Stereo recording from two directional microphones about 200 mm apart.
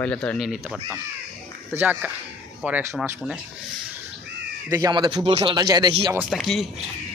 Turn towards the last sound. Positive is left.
turn(degrees=0)  # may be behind; listen again after turning